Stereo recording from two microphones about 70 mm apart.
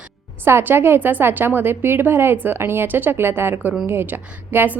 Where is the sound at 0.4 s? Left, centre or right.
Right.